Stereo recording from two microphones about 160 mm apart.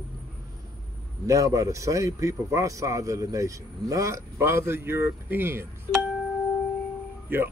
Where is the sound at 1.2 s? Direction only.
20° right (ahead or behind).